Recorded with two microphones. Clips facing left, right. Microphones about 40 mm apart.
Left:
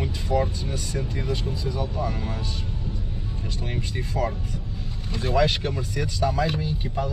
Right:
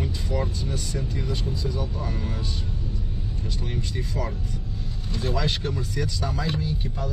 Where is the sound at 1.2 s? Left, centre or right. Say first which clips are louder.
Left 1 dB; centre.